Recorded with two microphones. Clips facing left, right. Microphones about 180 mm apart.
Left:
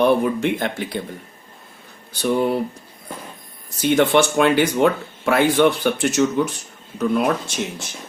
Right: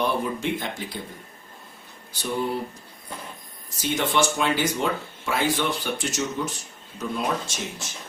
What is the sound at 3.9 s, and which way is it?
Speech, 65° left (ahead or behind).